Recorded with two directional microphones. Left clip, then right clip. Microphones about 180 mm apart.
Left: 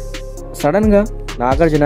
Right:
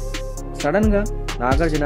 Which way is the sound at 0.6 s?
40° left (ahead or behind).